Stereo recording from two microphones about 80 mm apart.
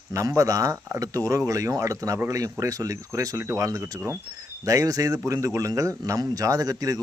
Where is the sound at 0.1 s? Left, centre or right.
Right.